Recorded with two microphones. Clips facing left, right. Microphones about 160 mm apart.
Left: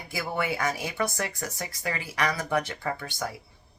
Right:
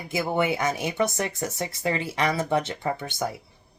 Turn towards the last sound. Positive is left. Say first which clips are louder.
# right 4 dB
turn(degrees=-20)  # may be behind; listen again after turning